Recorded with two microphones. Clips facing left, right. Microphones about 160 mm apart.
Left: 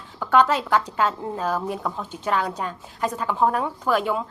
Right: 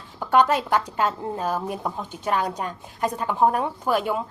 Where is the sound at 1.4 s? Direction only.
10° right (ahead or behind).